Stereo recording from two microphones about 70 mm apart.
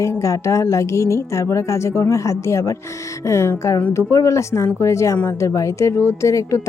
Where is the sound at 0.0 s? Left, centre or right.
Left.